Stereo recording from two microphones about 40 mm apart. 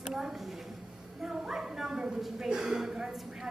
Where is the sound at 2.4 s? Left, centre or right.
Centre.